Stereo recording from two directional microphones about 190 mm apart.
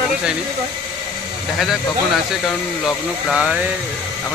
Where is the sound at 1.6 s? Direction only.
Centre (ahead or behind).